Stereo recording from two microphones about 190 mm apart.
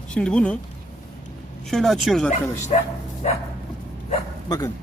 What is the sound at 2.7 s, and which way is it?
Speech, 35° left (ahead or behind).